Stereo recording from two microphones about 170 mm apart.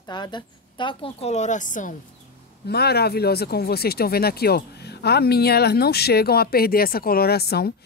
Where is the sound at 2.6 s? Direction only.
70° left (ahead or behind).